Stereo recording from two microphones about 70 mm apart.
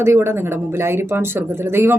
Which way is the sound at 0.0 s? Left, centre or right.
Right.